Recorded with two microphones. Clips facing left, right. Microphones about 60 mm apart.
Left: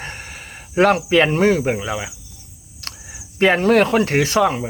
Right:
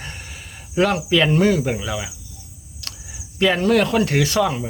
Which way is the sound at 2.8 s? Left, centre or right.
Left.